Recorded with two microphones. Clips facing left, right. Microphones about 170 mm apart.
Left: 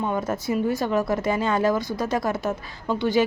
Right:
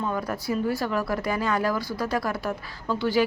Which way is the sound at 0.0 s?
20° left (ahead or behind).